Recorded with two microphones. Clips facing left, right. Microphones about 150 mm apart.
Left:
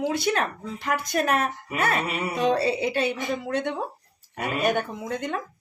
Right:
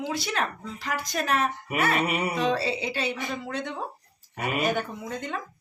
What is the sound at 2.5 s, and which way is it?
Speech, 50° left (ahead or behind).